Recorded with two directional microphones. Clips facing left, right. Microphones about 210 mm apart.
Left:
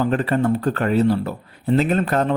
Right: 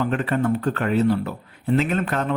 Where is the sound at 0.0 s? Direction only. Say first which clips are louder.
Left 3 dB; 35° left (ahead or behind).